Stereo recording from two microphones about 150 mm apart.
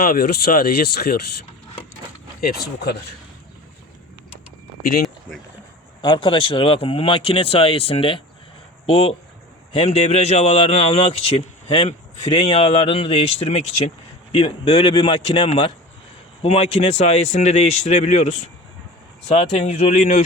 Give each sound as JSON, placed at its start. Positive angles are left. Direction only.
{"t": 0.0, "sound": "speech", "side_deg": 85}
{"t": 2.4, "sound": "speech", "side_deg": 90}
{"t": 4.8, "sound": "speech", "side_deg": 80}
{"t": 6.0, "sound": "a man's voice", "side_deg": 30}